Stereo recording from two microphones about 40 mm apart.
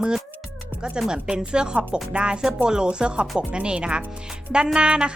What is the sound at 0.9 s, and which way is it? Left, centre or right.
Speech, centre.